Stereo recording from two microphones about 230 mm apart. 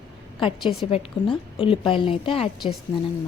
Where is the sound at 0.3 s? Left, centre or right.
Left.